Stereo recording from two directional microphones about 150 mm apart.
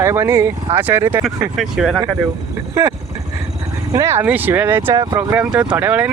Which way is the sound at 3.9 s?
20° right (ahead or behind).